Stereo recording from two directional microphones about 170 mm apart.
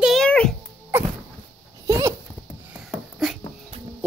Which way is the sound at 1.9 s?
20° right (ahead or behind).